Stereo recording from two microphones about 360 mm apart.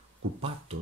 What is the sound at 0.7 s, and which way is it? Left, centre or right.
Speech, centre.